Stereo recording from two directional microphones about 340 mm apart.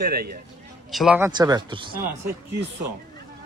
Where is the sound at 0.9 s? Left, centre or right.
Centre.